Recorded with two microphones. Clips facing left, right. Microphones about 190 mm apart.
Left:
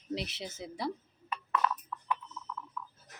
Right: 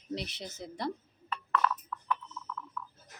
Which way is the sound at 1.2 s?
15° left (ahead or behind).